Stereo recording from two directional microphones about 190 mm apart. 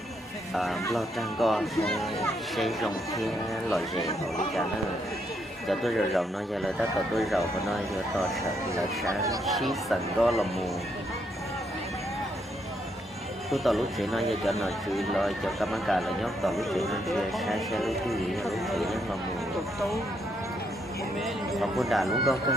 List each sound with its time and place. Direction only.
0.5 s speech: centre (ahead or behind)
5.6 s speech: centre (ahead or behind)
8.7 s speech: 15° right (ahead or behind)
9.5 s speech: centre (ahead or behind)
13.5 s speech: centre (ahead or behind)
21.2 s speech: centre (ahead or behind)